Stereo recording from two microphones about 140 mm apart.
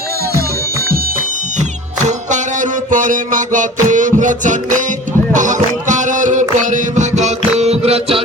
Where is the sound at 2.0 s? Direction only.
60° right (ahead or behind).